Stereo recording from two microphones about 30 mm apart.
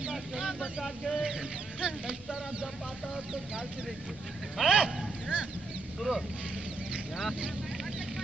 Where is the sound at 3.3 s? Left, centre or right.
Centre.